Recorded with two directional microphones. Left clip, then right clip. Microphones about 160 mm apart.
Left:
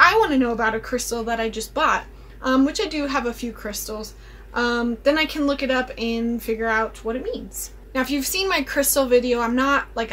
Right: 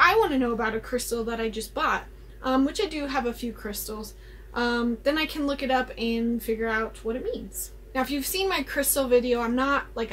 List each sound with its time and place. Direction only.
0.0 s speech: 10° left (ahead or behind)